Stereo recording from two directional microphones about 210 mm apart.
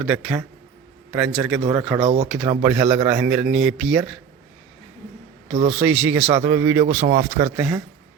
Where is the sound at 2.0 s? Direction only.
30° right (ahead or behind).